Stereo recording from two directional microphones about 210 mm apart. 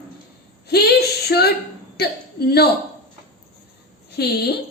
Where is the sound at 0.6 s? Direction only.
50° left (ahead or behind).